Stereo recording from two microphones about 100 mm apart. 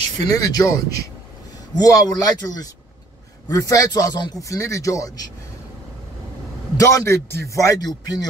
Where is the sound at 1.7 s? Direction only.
40° left (ahead or behind).